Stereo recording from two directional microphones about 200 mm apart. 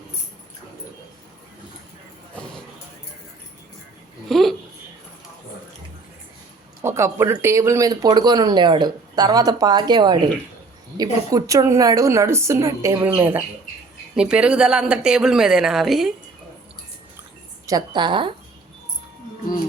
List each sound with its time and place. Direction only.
4.3 s a sound: centre (ahead or behind)
6.8 s a woman's voice: 15° right (ahead or behind)
17.7 s speech: 20° right (ahead or behind)